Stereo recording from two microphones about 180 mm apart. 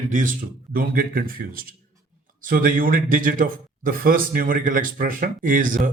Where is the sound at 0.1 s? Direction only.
45° right (ahead or behind).